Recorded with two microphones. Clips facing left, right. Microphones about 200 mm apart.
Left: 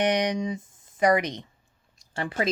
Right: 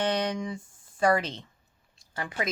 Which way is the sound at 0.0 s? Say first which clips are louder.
Left 4 dB; 15° left (ahead or behind).